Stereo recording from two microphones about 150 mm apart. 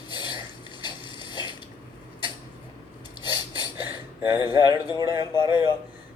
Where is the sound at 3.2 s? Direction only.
30° left (ahead or behind).